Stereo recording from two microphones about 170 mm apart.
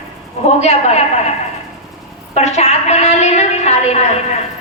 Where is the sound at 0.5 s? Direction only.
40° left (ahead or behind).